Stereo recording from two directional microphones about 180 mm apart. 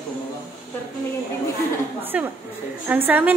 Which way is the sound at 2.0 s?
10° right (ahead or behind).